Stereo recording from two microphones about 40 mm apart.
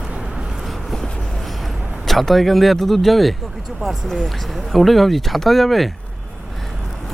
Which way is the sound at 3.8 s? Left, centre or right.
Right.